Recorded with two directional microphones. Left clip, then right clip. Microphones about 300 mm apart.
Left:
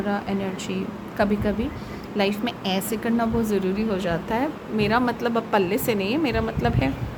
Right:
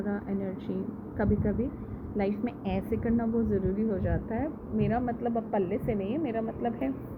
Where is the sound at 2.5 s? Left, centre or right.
Centre.